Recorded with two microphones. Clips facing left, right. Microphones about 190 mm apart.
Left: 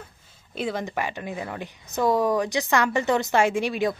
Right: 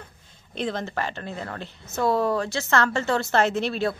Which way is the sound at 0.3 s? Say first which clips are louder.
Even; 10° left (ahead or behind).